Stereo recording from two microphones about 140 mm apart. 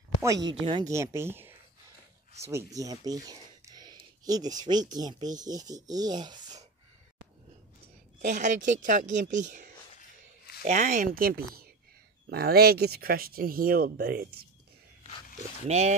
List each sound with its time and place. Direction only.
0.2 s speech: 25° right (ahead or behind)
0.6 s speech: 40° right (ahead or behind)
0.8 s speech: 20° right (ahead or behind)
8.2 s speech: 60° right (ahead or behind); by 14.2 s 90° right
15.6 s speech: 50° right (ahead or behind)